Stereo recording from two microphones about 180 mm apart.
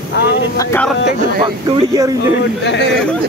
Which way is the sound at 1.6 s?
20° right (ahead or behind).